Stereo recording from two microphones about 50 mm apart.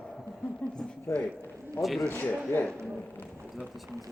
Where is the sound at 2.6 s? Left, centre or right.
Centre.